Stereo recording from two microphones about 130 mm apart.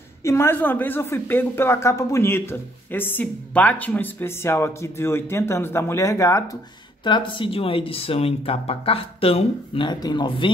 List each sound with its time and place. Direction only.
0.2 s speech: 20° left (ahead or behind)
7.1 s speech: 40° left (ahead or behind)